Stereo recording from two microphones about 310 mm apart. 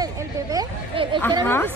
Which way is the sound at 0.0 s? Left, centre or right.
Centre.